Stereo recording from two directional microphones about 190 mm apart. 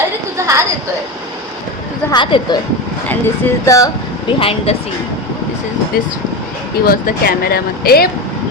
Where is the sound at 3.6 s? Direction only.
20° left (ahead or behind).